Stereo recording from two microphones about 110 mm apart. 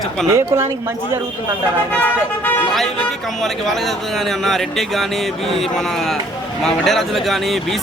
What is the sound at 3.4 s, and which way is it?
Speech, centre (ahead or behind).